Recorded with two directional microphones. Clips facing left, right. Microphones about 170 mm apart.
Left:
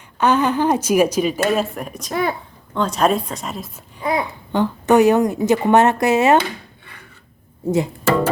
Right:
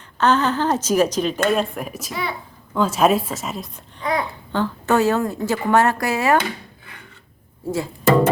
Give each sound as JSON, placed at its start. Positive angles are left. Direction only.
{"t": 0.2, "sound": "a woman's voice", "side_deg": 10}
{"t": 2.0, "sound": "speech", "side_deg": 45}
{"t": 2.7, "sound": "a woman's voice", "side_deg": -5}
{"t": 4.0, "sound": "a child's voice", "side_deg": 20}
{"t": 7.6, "sound": "a child's voice", "side_deg": 20}